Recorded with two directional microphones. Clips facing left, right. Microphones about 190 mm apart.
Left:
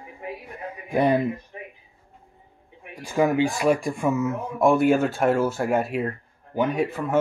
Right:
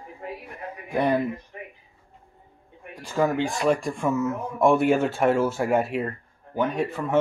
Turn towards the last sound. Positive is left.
turn(degrees=5)  # may be behind; listen again after turning